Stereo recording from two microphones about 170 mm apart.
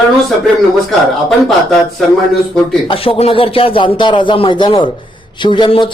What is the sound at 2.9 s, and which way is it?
A man's voice, 30° left (ahead or behind).